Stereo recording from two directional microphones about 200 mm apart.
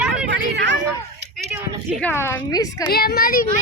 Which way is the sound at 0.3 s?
60° right (ahead or behind).